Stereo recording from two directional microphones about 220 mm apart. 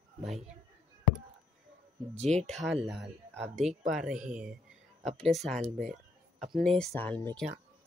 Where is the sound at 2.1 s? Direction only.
30° right (ahead or behind).